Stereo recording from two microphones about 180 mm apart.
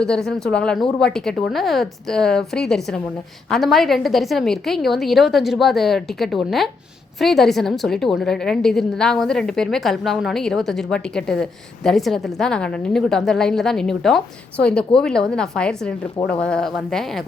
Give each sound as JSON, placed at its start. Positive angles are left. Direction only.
{"t": 0.0, "sound": "a woman's voice", "side_deg": 5}